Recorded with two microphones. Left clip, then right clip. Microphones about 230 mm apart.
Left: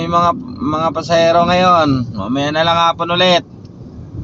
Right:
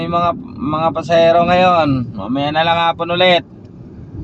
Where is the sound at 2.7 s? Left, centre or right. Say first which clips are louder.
Left 2 dB; centre.